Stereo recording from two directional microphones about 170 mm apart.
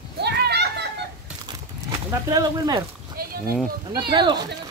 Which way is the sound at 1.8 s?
20° right (ahead or behind).